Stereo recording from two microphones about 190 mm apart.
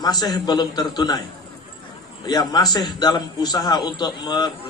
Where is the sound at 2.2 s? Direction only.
20° left (ahead or behind).